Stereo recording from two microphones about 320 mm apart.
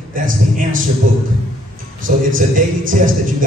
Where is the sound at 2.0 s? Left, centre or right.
Right.